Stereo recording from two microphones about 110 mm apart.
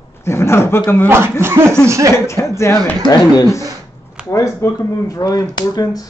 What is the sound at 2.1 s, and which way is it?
Speech, 25° left (ahead or behind).